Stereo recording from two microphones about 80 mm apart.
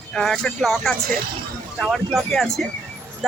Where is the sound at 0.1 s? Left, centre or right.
Centre.